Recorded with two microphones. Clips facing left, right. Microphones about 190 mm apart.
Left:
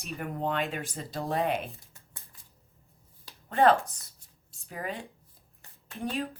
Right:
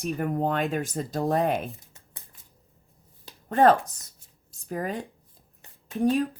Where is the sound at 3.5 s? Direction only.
45° right (ahead or behind).